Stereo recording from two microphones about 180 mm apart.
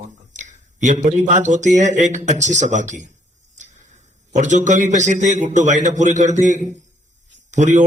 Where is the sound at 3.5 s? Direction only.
45° right (ahead or behind).